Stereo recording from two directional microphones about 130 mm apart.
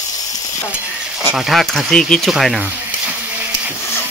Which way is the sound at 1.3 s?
Centre (ahead or behind).